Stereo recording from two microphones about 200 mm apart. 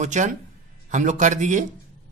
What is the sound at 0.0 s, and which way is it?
A man's voice, 35° right (ahead or behind).